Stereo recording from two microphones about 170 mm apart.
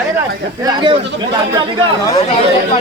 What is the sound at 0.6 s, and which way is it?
Speech, 30° right (ahead or behind).